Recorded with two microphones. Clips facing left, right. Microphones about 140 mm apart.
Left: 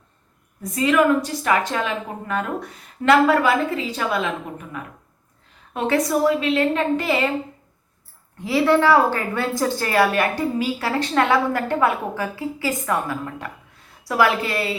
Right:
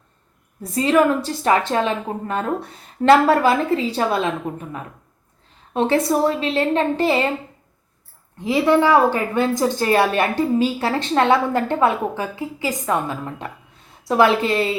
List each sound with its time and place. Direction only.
0.6 s a woman's voice: 30° right (ahead or behind)
8.4 s a woman's voice: 20° right (ahead or behind)